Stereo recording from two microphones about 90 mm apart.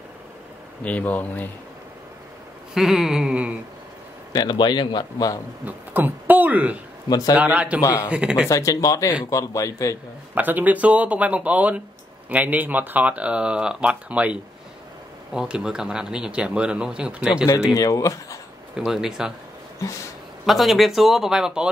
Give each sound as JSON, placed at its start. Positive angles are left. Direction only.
{"t": 0.8, "sound": "speech", "side_deg": 15}
{"t": 2.7, "sound": "speech", "side_deg": -5}
{"t": 4.3, "sound": "a man's voice", "side_deg": 55}
{"t": 5.7, "sound": "speech", "side_deg": -20}
{"t": 7.1, "sound": "a man's voice", "side_deg": 45}
{"t": 7.3, "sound": "speech", "side_deg": -15}
{"t": 8.5, "sound": "speech", "side_deg": 35}
{"t": 10.3, "sound": "speech", "side_deg": -20}
{"t": 17.7, "sound": "speech", "side_deg": 40}
{"t": 18.8, "sound": "speech", "side_deg": -5}
{"t": 20.4, "sound": "speech", "side_deg": 0}